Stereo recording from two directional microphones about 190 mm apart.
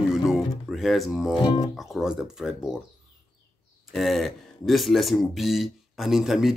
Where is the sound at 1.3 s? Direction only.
25° left (ahead or behind).